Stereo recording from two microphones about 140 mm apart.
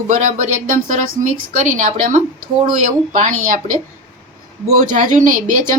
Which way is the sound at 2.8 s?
65° right (ahead or behind).